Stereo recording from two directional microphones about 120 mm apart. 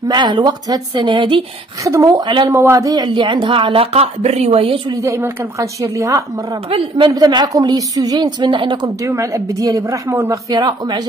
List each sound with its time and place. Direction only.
0.1 s speech: 40° right (ahead or behind)
1.9 s speech: 30° right (ahead or behind)
2.5 s a woman's voice: 20° right (ahead or behind)
3.1 s speech: 45° right (ahead or behind)
5.0 s a woman's voice: 25° right (ahead or behind); by 8.9 s 40° right (ahead or behind)
9.0 s a woman's voice: 25° right (ahead or behind)
10.5 s speech: 35° right (ahead or behind)